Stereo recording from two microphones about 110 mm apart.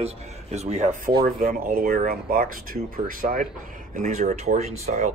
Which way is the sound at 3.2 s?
90° right.